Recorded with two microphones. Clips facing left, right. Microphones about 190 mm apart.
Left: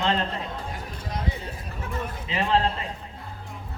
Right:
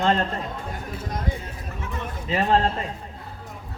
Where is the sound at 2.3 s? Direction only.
45° right (ahead or behind).